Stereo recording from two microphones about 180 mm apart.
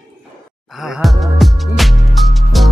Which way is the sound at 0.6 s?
Centre (ahead or behind).